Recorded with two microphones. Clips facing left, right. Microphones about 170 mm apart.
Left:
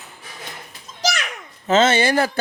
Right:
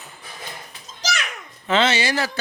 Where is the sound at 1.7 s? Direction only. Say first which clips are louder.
Left 4 dB; 45° left (ahead or behind).